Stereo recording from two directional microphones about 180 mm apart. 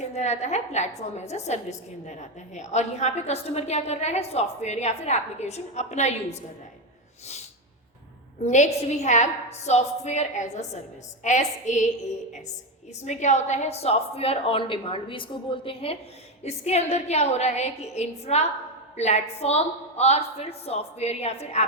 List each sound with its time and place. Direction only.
0.0 s a woman's voice: 40° left (ahead or behind)
8.4 s a woman's voice: 40° left (ahead or behind)
13.0 s a woman's voice: 40° left (ahead or behind)